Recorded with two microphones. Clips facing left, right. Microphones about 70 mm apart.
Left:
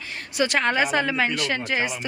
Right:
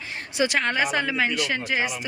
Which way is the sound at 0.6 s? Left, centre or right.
Centre.